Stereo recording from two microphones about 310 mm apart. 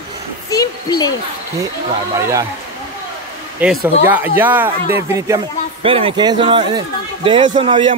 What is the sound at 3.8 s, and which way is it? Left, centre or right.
Speech, centre.